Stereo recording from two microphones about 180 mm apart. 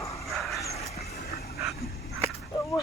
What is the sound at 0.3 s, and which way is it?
Dog, centre (ahead or behind).